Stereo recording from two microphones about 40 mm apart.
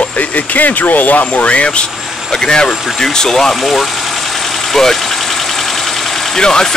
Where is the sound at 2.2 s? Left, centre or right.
Centre.